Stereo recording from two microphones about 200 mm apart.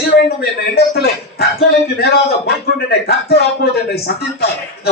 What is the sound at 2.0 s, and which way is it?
Speech, 50° left (ahead or behind).